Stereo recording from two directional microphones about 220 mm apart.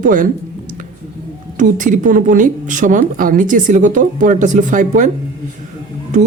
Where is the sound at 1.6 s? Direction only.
35° right (ahead or behind).